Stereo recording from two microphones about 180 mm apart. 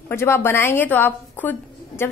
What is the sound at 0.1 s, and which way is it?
A woman's voice, 15° left (ahead or behind).